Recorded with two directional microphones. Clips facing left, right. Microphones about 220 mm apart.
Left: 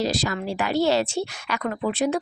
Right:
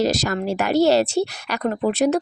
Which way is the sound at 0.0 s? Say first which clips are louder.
Right 4 dB; 45° right (ahead or behind).